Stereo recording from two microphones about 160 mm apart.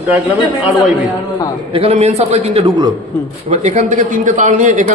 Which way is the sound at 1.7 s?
40° right (ahead or behind).